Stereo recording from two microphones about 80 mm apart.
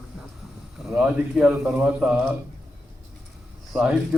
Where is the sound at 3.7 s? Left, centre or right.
Centre.